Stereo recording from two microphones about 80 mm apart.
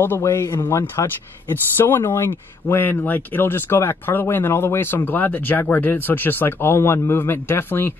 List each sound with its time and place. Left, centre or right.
0.2 s speech: left